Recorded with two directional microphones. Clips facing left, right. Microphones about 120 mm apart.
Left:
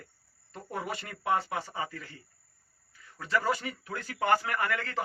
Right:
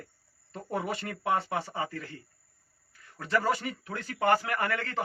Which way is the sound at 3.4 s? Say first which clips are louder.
Right 1 dB; 35° right (ahead or behind).